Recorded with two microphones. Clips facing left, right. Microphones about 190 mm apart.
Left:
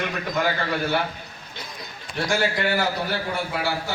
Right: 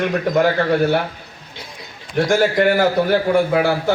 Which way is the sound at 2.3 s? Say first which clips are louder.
Right 8 dB; 50° right (ahead or behind).